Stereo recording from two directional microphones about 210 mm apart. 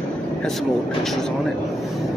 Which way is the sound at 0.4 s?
Centre (ahead or behind).